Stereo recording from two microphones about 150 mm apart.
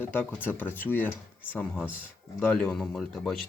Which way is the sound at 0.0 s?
15° left (ahead or behind).